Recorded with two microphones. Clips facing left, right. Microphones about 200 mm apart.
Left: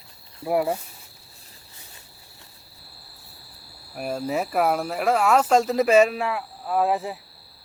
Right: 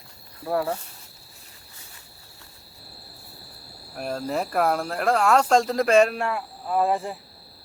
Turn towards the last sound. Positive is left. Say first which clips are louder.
# even
turn(degrees=5)  # may be behind; listen again after turning